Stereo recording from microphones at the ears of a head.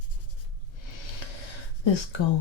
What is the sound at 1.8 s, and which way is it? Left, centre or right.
Speech, left.